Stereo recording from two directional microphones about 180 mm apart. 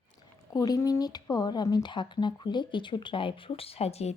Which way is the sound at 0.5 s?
20° left (ahead or behind).